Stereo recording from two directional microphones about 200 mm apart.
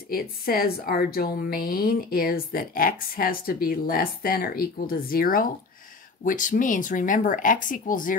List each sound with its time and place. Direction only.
0.1 s a woman's voice: 50° left (ahead or behind)